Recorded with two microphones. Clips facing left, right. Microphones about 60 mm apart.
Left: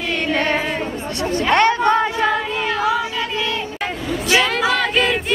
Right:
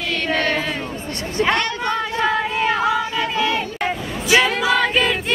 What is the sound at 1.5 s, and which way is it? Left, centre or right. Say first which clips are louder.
Chatter: left 9 dB; left.